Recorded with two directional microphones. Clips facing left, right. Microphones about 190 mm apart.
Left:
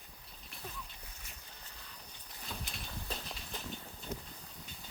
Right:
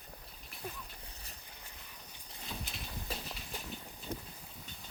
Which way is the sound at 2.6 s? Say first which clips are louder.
Right 1 dB; 5° right (ahead or behind).